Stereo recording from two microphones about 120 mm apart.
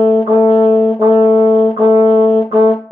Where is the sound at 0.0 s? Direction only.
55° left (ahead or behind).